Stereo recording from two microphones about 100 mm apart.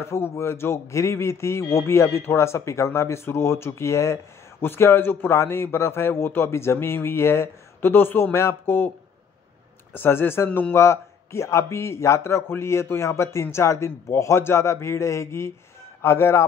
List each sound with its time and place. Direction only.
0.0 s speech: 25° left (ahead or behind)
9.9 s speech: 20° left (ahead or behind)